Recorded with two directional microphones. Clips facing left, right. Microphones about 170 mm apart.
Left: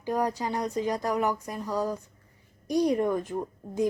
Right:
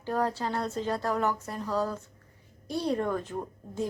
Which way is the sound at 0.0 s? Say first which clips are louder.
Left 1 dB; 15° left (ahead or behind).